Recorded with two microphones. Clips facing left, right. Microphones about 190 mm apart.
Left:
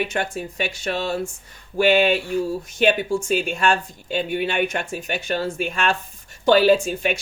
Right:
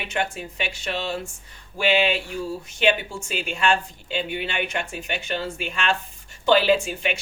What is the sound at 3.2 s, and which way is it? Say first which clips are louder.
Speech: even; 50° left (ahead or behind).